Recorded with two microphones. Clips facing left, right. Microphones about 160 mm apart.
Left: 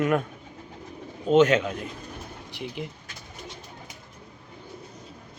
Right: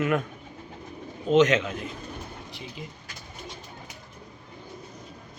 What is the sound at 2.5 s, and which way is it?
Speech, 70° left (ahead or behind).